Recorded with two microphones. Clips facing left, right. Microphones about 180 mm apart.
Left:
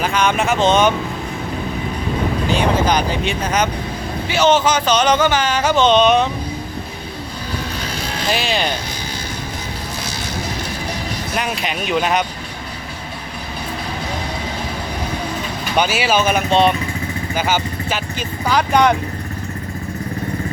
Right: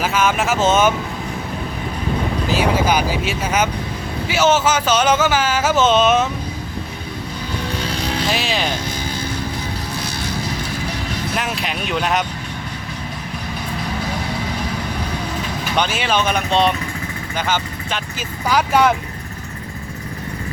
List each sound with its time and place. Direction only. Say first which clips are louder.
0.0 s speech: left 1 dB; 5° right (ahead or behind)
2.5 s speech: even; 5° right (ahead or behind)
8.3 s speech: left 4 dB; centre (ahead or behind)
11.3 s speech: left 4 dB; centre (ahead or behind)
15.7 s speech: left 3 dB; 10° left (ahead or behind)
18.2 s speech: even; 5° right (ahead or behind)